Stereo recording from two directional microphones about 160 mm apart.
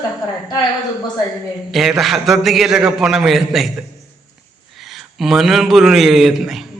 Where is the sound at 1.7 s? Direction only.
Centre (ahead or behind).